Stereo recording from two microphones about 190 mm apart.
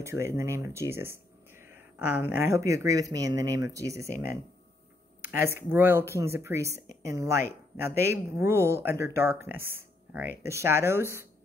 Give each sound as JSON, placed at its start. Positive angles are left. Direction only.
{"t": 0.0, "sound": "speech", "side_deg": -15}